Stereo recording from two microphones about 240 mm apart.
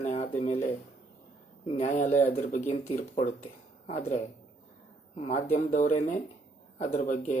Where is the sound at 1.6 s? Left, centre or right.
Left.